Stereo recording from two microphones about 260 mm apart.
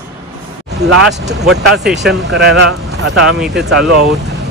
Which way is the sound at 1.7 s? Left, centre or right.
Centre.